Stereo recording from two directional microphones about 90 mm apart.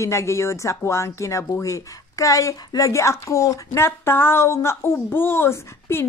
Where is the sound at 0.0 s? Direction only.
35° left (ahead or behind).